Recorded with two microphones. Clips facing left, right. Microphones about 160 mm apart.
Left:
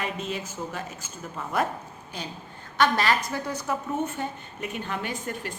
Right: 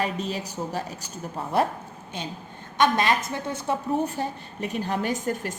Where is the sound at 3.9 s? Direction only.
35° right (ahead or behind).